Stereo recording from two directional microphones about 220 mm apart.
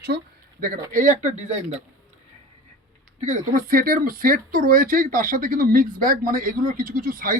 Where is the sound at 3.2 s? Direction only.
35° right (ahead or behind).